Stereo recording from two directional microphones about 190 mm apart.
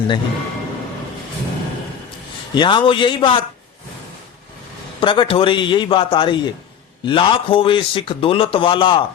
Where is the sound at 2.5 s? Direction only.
25° left (ahead or behind).